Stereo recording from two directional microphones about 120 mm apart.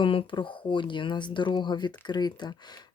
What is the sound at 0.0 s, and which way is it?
Speech, 45° left (ahead or behind).